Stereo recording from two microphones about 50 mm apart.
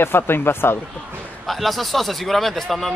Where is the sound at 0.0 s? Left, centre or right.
Left.